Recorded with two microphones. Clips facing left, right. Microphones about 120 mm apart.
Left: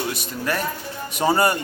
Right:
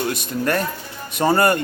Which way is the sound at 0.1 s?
50° right (ahead or behind).